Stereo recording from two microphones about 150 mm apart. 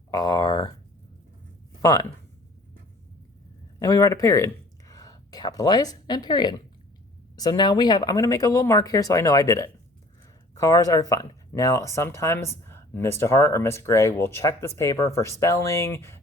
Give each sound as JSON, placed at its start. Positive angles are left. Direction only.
{"t": 0.1, "sound": "speech", "side_deg": 25}
{"t": 1.8, "sound": "speech", "side_deg": 25}
{"t": 3.8, "sound": "speech", "side_deg": 25}